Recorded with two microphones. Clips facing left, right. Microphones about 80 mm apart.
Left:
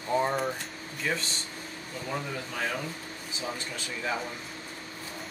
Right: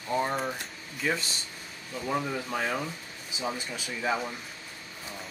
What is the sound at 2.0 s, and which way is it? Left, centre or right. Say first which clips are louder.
Speech: right 4 dB; centre.